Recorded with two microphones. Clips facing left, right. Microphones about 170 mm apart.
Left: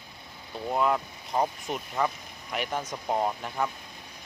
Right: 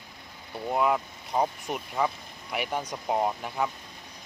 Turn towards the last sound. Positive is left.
turn(degrees=-5)  # may be behind; listen again after turning